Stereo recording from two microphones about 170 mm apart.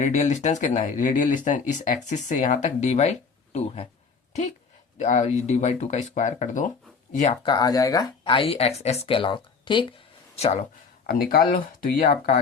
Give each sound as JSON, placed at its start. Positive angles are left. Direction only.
{"t": 0.0, "sound": "speech", "side_deg": 40}
{"t": 4.9, "sound": "speech", "side_deg": 45}
{"t": 7.4, "sound": "speech", "side_deg": 25}
{"t": 10.3, "sound": "speech", "side_deg": 40}
{"t": 11.0, "sound": "speech", "side_deg": 60}